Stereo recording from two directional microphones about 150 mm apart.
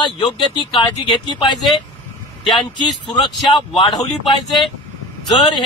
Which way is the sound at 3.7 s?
35° left (ahead or behind).